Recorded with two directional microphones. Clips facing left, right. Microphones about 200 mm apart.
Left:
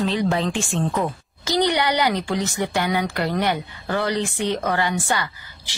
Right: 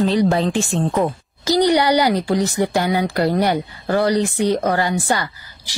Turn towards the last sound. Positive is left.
turn(degrees=-35)  # may be behind; listen again after turning